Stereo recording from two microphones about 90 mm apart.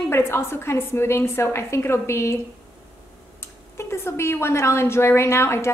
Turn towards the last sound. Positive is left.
turn(degrees=30)  # may be behind; listen again after turning